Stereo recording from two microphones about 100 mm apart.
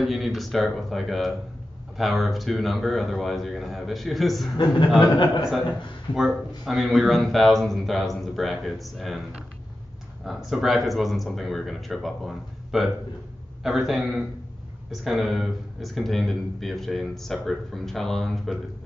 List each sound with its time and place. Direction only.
0.0 s speech: centre (ahead or behind)
5.1 s a man's voice: 50° left (ahead or behind)
6.6 s speech: centre (ahead or behind)